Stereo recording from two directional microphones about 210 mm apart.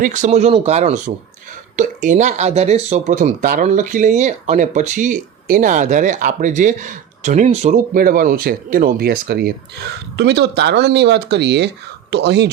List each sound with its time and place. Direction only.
0.0 s speech: 35° right (ahead or behind); by 12.5 s 55° right (ahead or behind)